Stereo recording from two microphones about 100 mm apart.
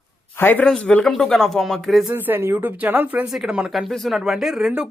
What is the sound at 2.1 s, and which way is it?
Speech, 20° right (ahead or behind).